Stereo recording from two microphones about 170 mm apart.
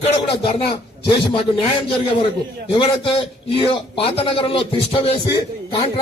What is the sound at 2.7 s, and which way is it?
Speech, 30° left (ahead or behind).